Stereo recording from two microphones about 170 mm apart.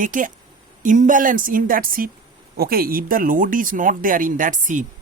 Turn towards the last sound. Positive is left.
turn(degrees=-50)  # may be behind; listen again after turning